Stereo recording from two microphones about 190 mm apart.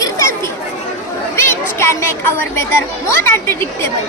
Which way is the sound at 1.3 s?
15° left (ahead or behind).